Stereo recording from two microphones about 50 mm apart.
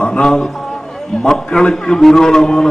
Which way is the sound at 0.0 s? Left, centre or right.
Centre.